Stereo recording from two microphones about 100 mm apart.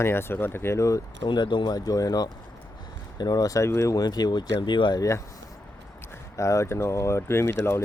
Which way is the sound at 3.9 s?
40° left (ahead or behind).